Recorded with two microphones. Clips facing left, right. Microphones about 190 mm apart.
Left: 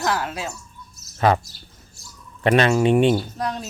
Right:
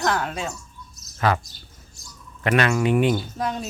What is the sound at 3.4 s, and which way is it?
Speech, centre (ahead or behind).